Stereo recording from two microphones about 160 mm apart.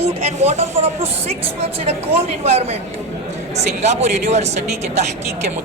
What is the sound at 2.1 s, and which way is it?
Speech, 40° right (ahead or behind).